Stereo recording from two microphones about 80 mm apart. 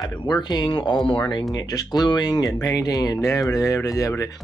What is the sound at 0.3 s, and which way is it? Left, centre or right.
Speech, left.